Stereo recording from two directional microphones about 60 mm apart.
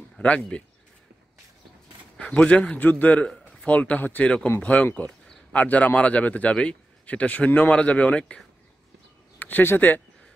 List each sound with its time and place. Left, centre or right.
0.2 s a man's voice: left
2.1 s a man's voice: left
9.4 s speech: left